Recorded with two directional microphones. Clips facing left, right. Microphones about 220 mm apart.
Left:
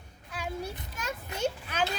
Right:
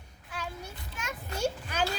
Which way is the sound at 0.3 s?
Centre (ahead or behind).